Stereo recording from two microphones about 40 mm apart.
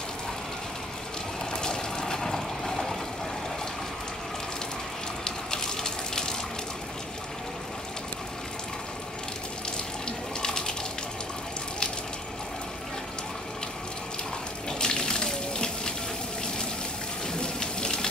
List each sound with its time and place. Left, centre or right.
1.6 s a sound: centre
5.2 s water: centre
10.0 s water: centre
14.7 s water: centre
17.3 s water tap: left